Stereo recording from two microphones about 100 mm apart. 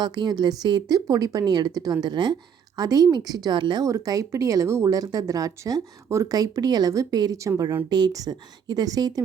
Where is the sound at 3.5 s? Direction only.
55° right (ahead or behind).